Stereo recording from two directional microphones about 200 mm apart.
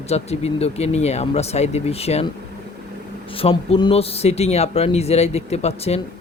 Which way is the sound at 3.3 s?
30° left (ahead or behind).